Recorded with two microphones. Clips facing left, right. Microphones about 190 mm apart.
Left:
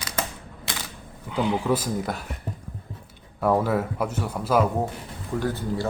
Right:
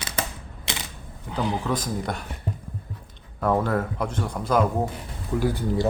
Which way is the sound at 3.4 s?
5° left (ahead or behind).